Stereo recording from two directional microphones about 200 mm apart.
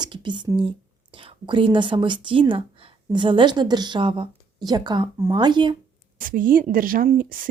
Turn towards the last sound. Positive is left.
turn(degrees=-45)  # may be behind; listen again after turning